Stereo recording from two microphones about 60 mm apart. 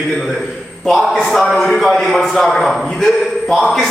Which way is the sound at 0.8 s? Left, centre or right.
Centre.